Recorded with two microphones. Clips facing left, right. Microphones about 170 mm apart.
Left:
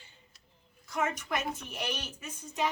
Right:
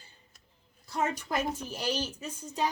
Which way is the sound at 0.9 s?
30° right (ahead or behind).